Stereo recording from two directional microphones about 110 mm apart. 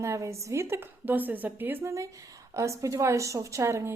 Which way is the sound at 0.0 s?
25° right (ahead or behind).